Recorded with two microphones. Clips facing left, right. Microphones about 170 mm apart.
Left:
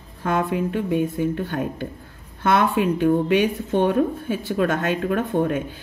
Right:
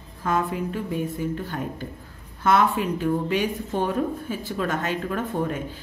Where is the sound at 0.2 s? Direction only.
60° left (ahead or behind).